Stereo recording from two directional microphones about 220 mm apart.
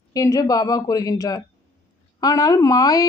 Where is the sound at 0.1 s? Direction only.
15° left (ahead or behind).